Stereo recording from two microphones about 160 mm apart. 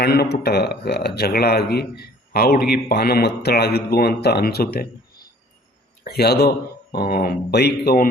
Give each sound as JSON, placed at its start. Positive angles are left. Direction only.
{"t": 0.0, "sound": "speech", "side_deg": 85}
{"t": 6.1, "sound": "speech", "side_deg": 90}